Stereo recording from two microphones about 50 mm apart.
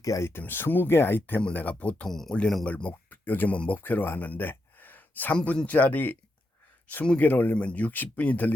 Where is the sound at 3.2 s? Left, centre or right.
Left.